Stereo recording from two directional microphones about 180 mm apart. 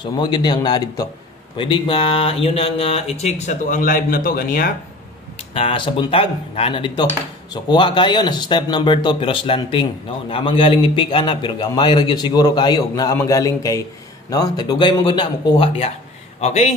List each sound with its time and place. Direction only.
0.0 s a man's voice: 25° left (ahead or behind); by 4.7 s 50° left (ahead or behind)
5.5 s a man's voice: 30° left (ahead or behind)